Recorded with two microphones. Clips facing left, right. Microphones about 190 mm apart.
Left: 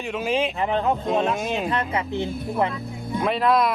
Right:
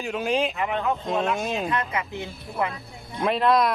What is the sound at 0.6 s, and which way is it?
Speech, 30° left (ahead or behind).